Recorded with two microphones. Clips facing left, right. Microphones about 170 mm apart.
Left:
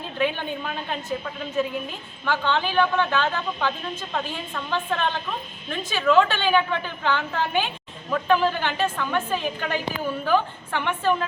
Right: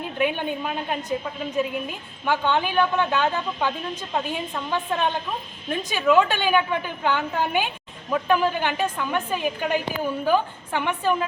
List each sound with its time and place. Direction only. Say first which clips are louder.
0.2 s a woman's voice: right 1 dB; 15° right (ahead or behind)